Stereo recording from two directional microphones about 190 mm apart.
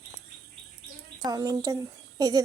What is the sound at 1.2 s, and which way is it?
A woman's voice, 20° right (ahead or behind).